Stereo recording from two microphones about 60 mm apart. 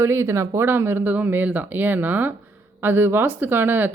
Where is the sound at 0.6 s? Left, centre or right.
Right.